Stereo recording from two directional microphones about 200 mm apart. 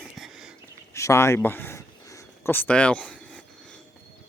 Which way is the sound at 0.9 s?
15° left (ahead or behind).